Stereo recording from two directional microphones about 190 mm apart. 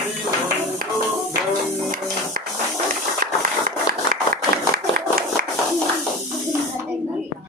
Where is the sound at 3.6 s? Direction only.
55° right (ahead or behind).